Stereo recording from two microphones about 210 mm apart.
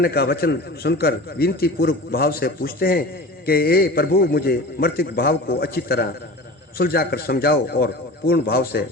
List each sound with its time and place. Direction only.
0.0 s a man's voice: 50° left (ahead or behind)